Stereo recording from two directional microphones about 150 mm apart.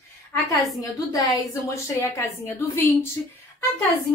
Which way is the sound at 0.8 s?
20° left (ahead or behind).